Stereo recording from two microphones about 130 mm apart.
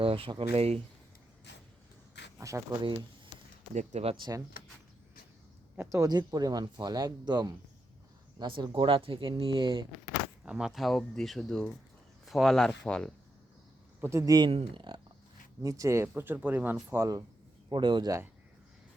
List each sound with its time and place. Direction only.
0.0 s speech: 45° right (ahead or behind)
2.4 s speech: 25° right (ahead or behind)
3.8 s speech: 55° right (ahead or behind)
4.2 s speech: 30° right (ahead or behind)
5.7 s speech: 15° right (ahead or behind)
6.0 s speech: 30° right (ahead or behind)
10.4 s speech: 5° right (ahead or behind)
14.0 s speech: 20° right (ahead or behind)
14.5 s speech: 45° right (ahead or behind)
15.6 s speech: 25° right (ahead or behind)
17.7 s speech: 35° right (ahead or behind)